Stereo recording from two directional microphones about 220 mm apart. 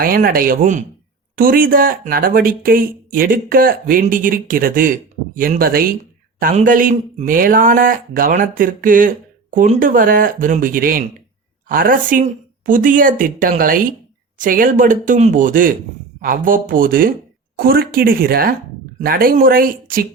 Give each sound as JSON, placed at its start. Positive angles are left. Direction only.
{"t": 0.0, "sound": "speech", "side_deg": -40}